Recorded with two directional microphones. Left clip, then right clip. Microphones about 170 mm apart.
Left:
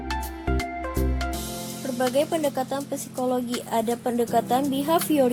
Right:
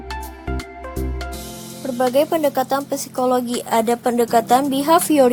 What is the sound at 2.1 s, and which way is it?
Speech, 25° right (ahead or behind).